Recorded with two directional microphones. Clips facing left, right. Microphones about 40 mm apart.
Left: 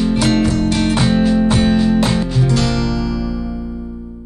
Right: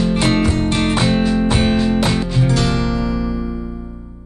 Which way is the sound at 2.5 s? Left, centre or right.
Centre.